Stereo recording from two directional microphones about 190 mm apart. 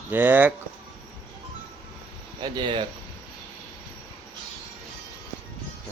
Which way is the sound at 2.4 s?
25° right (ahead or behind).